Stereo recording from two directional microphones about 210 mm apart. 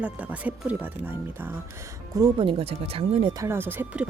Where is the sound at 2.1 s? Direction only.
20° right (ahead or behind).